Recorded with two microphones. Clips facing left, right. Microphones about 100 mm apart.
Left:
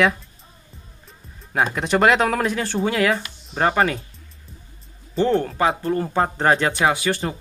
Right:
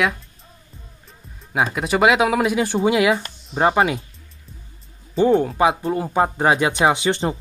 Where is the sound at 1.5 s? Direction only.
5° right (ahead or behind).